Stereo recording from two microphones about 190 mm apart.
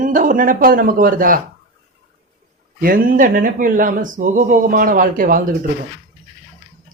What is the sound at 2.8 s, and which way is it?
A man's voice, 50° right (ahead or behind).